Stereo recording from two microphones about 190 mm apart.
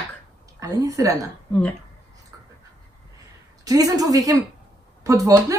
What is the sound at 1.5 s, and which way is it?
Speech, 5° left (ahead or behind).